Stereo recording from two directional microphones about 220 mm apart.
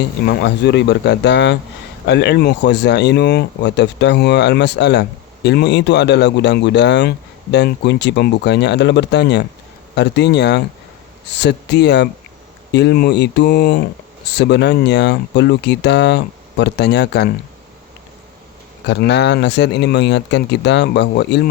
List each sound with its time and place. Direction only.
0.0 s speech: 50° left (ahead or behind)
18.9 s speech: 50° left (ahead or behind)